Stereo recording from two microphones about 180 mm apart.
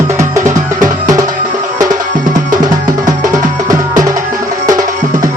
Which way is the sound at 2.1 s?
45° right (ahead or behind).